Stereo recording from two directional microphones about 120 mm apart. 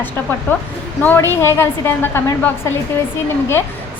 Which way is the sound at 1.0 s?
20° left (ahead or behind).